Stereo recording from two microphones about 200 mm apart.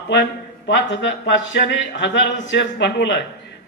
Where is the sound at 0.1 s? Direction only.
60° left (ahead or behind).